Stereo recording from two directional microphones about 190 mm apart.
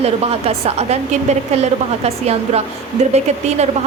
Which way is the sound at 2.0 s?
35° right (ahead or behind).